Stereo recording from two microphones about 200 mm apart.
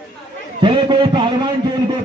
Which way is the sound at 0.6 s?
25° right (ahead or behind).